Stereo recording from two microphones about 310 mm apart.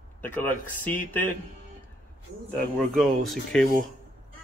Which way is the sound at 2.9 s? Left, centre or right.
Centre.